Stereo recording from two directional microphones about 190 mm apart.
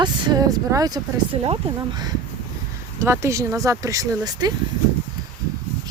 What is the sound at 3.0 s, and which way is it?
Speech, 15° right (ahead or behind).